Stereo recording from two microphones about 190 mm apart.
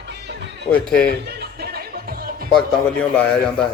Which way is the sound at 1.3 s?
55° right (ahead or behind).